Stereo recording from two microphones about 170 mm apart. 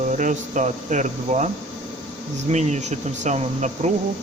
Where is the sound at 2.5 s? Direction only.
40° right (ahead or behind).